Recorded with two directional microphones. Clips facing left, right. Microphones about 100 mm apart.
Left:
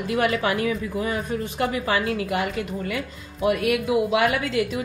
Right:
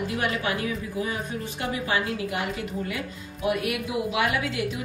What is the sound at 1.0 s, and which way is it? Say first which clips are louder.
Speech: left 4 dB; 60° left (ahead or behind).